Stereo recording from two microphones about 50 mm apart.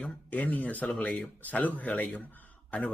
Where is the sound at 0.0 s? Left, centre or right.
Left.